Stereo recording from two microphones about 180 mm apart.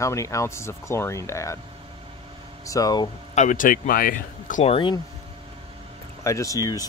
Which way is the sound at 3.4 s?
45° left (ahead or behind).